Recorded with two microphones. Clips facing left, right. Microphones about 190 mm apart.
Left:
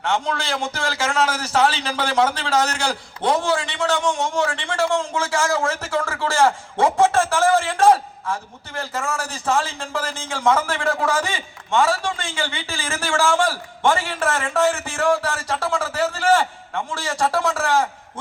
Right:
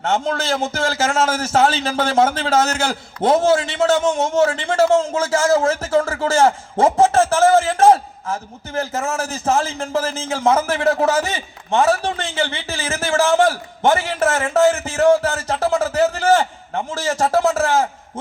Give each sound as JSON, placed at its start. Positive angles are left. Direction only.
{"t": 0.0, "sound": "a man's voice", "side_deg": -40}